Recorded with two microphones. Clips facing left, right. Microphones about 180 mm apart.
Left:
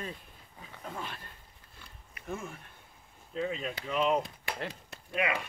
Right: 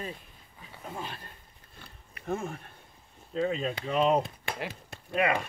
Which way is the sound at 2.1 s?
35° right (ahead or behind).